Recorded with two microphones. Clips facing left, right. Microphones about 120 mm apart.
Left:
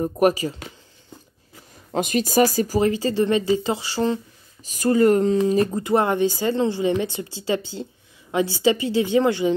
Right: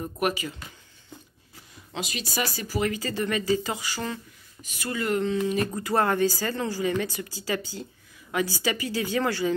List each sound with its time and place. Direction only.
0.0 s speech: 35° left (ahead or behind)
1.9 s speech: 45° left (ahead or behind)
5.7 s speech: 20° left (ahead or behind)